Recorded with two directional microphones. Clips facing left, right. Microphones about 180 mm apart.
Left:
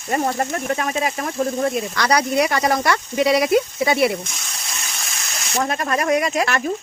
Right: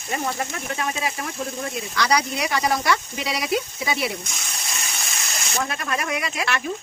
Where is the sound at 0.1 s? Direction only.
45° left (ahead or behind).